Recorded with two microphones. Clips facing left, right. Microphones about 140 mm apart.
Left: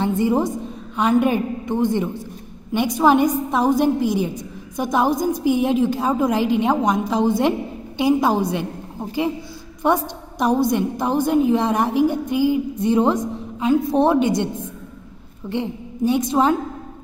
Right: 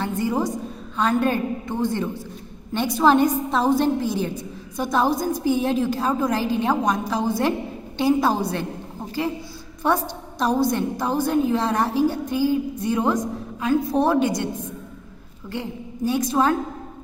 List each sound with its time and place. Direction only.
0.0 s a woman's voice: 20° left (ahead or behind)
9.8 s a woman's voice: 15° left (ahead or behind)
15.5 s a woman's voice: 20° left (ahead or behind)